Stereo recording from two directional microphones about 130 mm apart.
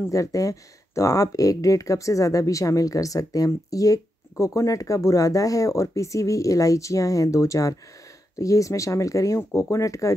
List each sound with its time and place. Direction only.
0.1 s speech: 25° left (ahead or behind)